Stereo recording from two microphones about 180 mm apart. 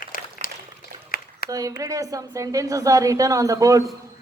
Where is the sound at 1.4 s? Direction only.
55° left (ahead or behind).